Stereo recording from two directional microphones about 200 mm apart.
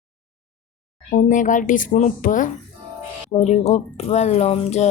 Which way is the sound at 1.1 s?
40° left (ahead or behind).